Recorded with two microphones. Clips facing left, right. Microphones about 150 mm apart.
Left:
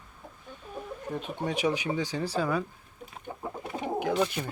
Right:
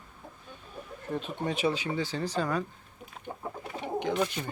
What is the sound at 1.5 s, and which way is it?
Speech, 15° left (ahead or behind).